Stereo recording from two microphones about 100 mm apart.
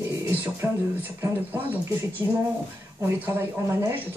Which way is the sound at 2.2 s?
30° right (ahead or behind).